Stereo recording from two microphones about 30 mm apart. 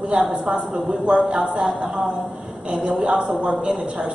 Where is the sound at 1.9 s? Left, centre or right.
Centre.